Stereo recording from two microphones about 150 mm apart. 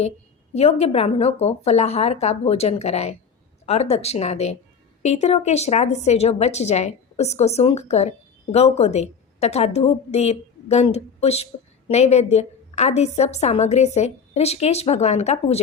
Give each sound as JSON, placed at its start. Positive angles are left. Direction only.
{"t": 0.5, "sound": "a woman's voice", "side_deg": 45}